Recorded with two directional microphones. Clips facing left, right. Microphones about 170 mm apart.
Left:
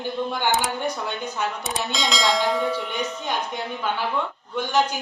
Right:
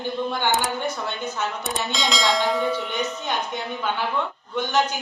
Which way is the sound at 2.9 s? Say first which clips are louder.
Right 1 dB; 10° left (ahead or behind).